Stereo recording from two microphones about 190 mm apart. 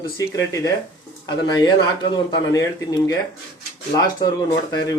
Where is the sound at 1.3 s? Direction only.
20° left (ahead or behind).